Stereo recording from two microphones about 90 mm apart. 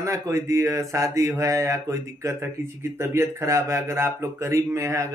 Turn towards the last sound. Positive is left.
turn(degrees=-35)  # may be behind; listen again after turning